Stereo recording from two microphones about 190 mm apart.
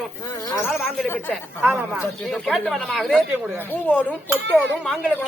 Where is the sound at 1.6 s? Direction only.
10° right (ahead or behind).